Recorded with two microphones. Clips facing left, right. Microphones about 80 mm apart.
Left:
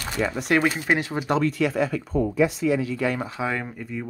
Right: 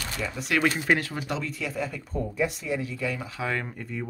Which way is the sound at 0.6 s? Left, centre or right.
Centre.